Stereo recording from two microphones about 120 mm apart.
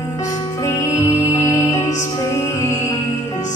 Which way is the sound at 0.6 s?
25° left (ahead or behind).